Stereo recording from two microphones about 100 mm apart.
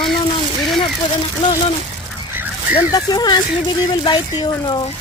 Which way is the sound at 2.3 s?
20° right (ahead or behind).